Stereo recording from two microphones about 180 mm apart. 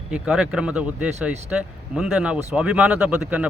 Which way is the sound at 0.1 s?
5° right (ahead or behind).